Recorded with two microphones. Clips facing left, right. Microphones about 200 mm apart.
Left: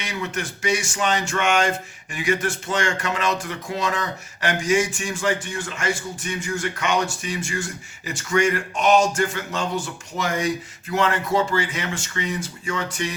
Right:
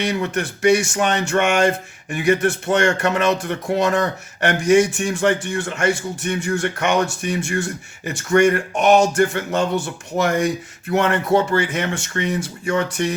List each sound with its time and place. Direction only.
0.0 s music: 60° right (ahead or behind)